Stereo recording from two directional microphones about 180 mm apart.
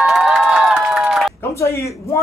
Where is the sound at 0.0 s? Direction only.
Centre (ahead or behind).